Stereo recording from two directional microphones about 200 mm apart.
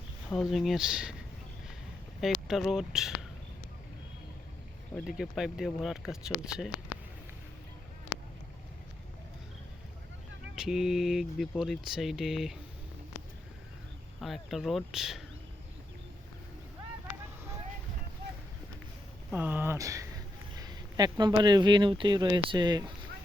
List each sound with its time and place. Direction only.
0.3 s speech: centre (ahead or behind)
2.2 s speech: centre (ahead or behind)
4.9 s speech: centre (ahead or behind)
10.5 s speech: centre (ahead or behind)
14.2 s speech: centre (ahead or behind)
19.3 s speech: 10° right (ahead or behind)